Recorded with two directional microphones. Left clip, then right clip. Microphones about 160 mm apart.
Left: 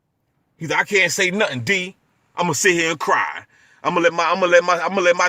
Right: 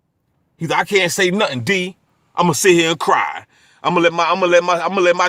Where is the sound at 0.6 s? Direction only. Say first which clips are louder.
Right 2 dB; 30° right (ahead or behind).